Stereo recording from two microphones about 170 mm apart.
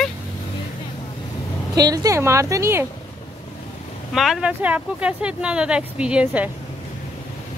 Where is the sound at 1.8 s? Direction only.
20° right (ahead or behind).